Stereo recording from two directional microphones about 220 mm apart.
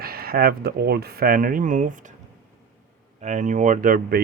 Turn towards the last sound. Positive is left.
turn(degrees=-40)  # may be behind; listen again after turning